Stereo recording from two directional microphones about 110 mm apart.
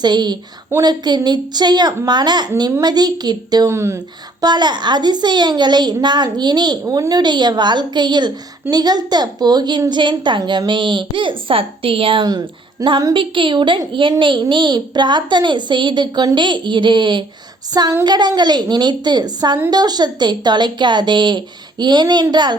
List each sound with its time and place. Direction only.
0.0 s a woman's voice: 40° right (ahead or behind)
3.7 s speech: 25° right (ahead or behind)
4.4 s a woman's voice: 40° right (ahead or behind)
12.8 s a woman's voice: 30° right (ahead or behind)
13.1 s a woman's voice: 50° right (ahead or behind)